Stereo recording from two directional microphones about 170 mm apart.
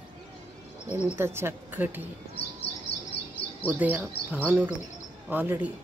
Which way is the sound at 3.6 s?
10° right (ahead or behind).